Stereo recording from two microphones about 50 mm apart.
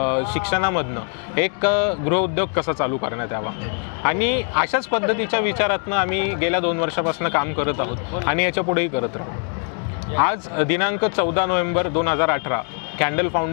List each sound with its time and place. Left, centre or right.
0.0 s speech: left
10.1 s speech: left